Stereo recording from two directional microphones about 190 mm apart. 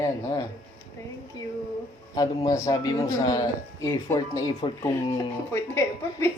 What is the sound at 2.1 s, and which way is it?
A man's voice, 20° left (ahead or behind).